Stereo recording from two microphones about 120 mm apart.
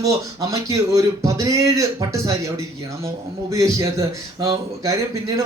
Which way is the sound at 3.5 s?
25° right (ahead or behind).